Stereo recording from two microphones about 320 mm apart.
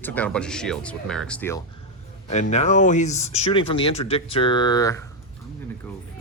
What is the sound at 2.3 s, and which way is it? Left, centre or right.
Speech, left.